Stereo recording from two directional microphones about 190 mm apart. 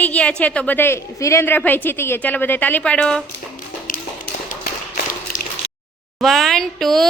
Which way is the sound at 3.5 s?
45° left (ahead or behind).